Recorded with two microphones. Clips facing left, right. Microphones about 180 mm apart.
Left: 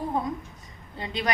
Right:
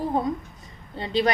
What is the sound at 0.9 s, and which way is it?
Speech, 30° right (ahead or behind).